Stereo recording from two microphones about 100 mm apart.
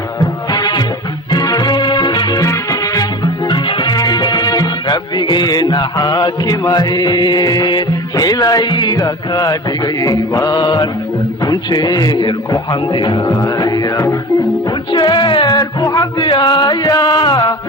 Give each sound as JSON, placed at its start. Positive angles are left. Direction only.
{"t": 0.5, "sound": "music", "side_deg": 50}
{"t": 3.5, "sound": "music", "side_deg": 50}
{"t": 11.4, "sound": "a man's voice", "side_deg": 45}
{"t": 13.4, "sound": "music", "side_deg": 40}
{"t": 13.9, "sound": "music", "side_deg": 30}
{"t": 14.9, "sound": "a sound", "side_deg": 50}
{"t": 16.9, "sound": "music", "side_deg": 40}